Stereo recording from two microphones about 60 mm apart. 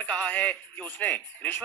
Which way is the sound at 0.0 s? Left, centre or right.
Left.